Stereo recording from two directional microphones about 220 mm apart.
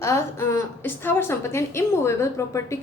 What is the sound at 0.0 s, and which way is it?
A woman's voice, 10° left (ahead or behind).